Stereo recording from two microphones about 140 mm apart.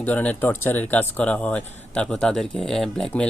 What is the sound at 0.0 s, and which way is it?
Speech, 10° left (ahead or behind).